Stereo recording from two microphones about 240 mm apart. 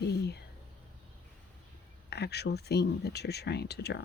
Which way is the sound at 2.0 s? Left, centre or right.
Left.